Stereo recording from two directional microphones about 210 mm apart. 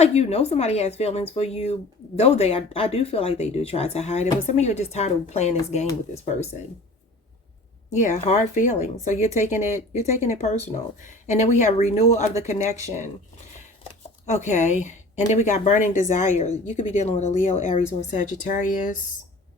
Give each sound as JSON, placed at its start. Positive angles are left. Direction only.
{"t": 0.0, "sound": "speech", "side_deg": 30}
{"t": 7.9, "sound": "speech", "side_deg": 35}
{"t": 10.0, "sound": "speech", "side_deg": -15}
{"t": 10.2, "sound": "speech", "side_deg": 30}
{"t": 14.3, "sound": "speech", "side_deg": 35}